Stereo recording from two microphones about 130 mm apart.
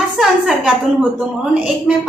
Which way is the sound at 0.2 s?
5° right (ahead or behind).